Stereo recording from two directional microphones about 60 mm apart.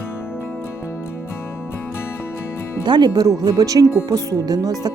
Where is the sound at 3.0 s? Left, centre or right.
Right.